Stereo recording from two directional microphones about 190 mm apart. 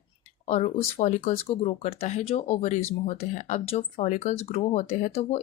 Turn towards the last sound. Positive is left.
turn(degrees=35)  # may be behind; listen again after turning